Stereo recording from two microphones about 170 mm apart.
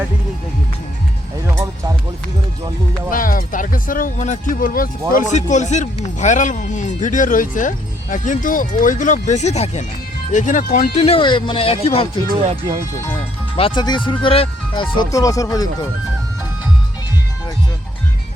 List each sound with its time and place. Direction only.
3.1 s speech: 55° left (ahead or behind)
5.5 s speech: 45° left (ahead or behind)
10.9 s speech: 35° left (ahead or behind)
12.3 s speech: 35° right (ahead or behind)
13.6 s speech: 30° left (ahead or behind)